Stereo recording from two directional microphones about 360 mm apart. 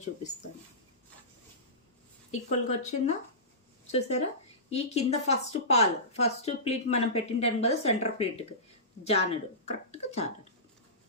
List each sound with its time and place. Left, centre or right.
2.5 s a woman's voice: centre